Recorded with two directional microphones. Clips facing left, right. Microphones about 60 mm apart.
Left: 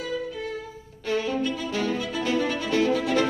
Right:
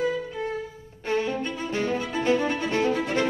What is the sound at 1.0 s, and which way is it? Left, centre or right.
Music, right.